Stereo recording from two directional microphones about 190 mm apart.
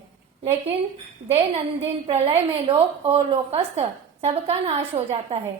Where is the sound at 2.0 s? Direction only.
30° right (ahead or behind).